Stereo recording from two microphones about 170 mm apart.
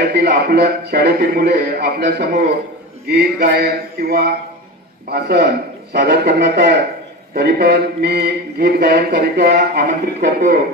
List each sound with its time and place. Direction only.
0.0 s mantra: 80° right
5.9 s a man's voice: 85° right
7.3 s mantra: 75° right (ahead or behind)